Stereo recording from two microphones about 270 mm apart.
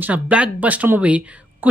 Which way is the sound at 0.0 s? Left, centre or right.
Centre.